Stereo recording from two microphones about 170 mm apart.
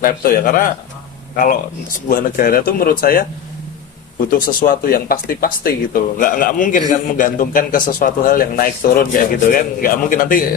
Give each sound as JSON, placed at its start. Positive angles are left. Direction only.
{"t": 0.0, "sound": "speech", "side_deg": 55}
{"t": 4.3, "sound": "speech", "side_deg": 55}